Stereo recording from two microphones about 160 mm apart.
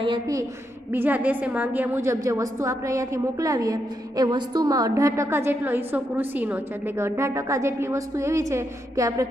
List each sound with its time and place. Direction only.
0.9 s a woman's voice: 10° right (ahead or behind)